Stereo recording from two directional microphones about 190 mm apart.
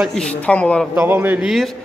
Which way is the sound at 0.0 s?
5° left (ahead or behind).